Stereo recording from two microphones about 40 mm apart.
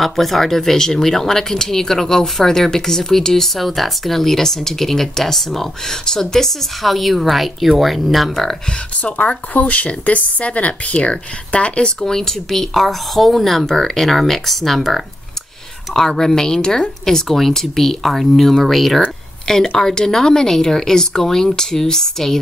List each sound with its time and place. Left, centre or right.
0.0 s speech: centre
9.0 s a woman's voice: left
12.0 s a woman's voice: centre